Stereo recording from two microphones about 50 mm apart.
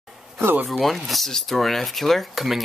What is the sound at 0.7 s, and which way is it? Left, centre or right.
Speech, centre.